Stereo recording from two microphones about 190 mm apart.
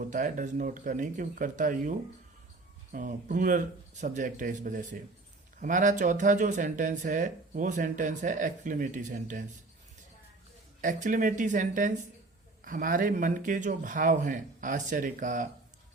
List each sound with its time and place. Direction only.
0.1 s speech: 40° right (ahead or behind)
10.8 s speech: 45° right (ahead or behind)